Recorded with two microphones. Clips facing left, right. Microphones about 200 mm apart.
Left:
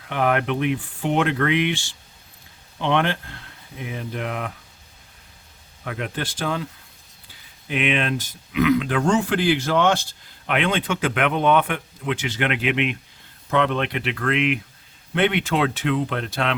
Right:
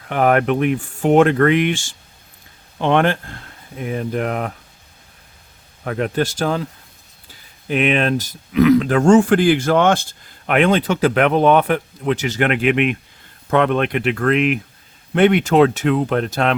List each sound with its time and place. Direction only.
0.1 s speech: 45° right (ahead or behind)
5.8 s speech: 40° right (ahead or behind)